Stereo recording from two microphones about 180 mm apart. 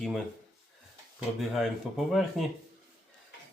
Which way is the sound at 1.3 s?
Centre (ahead or behind).